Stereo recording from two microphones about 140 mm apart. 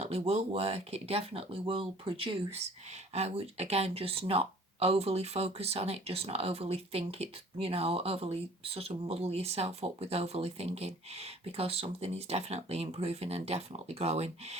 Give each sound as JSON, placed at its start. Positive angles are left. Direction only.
{"t": 0.0, "sound": "speech", "side_deg": -45}